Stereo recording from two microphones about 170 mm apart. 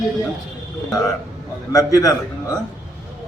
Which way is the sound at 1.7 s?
20° left (ahead or behind).